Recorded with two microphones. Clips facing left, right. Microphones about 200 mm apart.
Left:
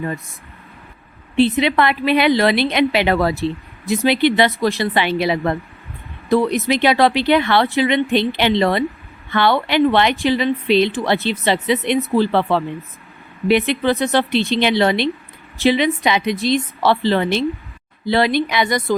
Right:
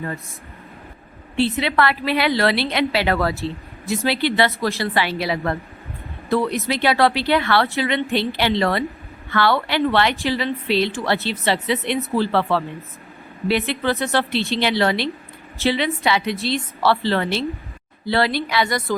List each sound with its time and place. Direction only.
1.4 s a woman's voice: 20° left (ahead or behind)